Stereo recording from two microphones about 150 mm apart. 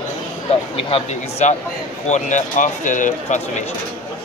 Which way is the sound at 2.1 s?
55° left (ahead or behind).